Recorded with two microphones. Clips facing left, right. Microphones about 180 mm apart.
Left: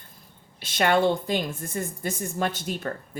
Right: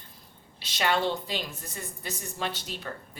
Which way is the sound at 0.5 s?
50° left (ahead or behind).